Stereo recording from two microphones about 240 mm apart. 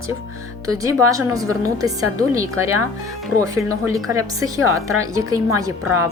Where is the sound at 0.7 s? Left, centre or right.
Centre.